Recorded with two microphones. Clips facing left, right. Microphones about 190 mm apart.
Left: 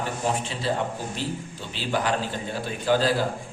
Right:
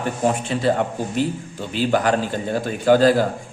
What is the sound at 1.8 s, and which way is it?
A man's voice, 50° right (ahead or behind).